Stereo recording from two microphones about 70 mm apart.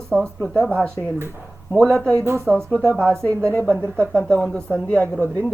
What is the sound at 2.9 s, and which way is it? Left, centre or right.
Speech, right.